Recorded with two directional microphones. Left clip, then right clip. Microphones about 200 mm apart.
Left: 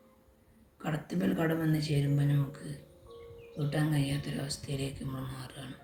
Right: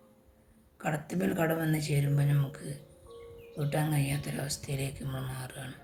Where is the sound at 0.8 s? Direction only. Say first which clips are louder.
Right 2 dB; 55° right (ahead or behind).